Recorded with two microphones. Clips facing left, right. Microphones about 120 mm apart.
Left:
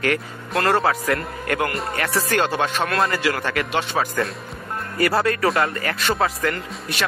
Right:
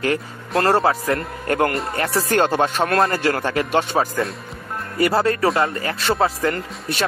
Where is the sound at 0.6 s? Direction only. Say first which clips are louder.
Right 2 dB; 35° right (ahead or behind).